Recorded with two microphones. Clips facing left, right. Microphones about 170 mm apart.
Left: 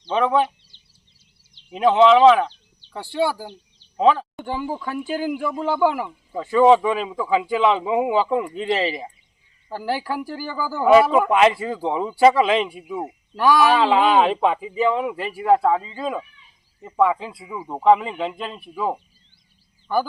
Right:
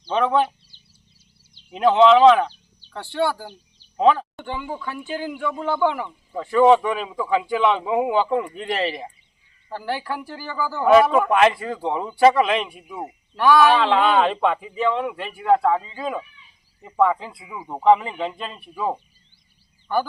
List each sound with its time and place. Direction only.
0.0 s a man's voice: centre (ahead or behind)
1.7 s speech: centre (ahead or behind)
3.9 s a sound: centre (ahead or behind)
4.5 s speech: 30° left (ahead or behind)
5.1 s a man's voice: 10° left (ahead or behind)